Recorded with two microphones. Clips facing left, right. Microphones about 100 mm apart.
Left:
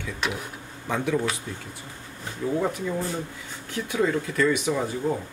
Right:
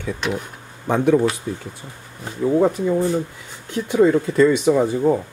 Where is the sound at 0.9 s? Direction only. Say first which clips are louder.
Right 9 dB; 40° right (ahead or behind).